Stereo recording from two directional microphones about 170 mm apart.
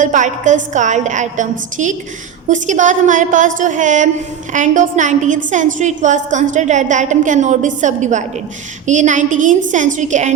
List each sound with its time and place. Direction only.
0.0 s a woman's voice: 45° right (ahead or behind)